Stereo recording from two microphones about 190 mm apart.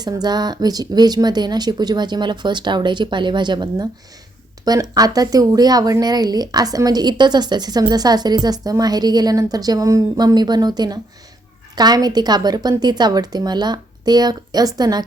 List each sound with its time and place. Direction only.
0.0 s speech: 20° right (ahead or behind)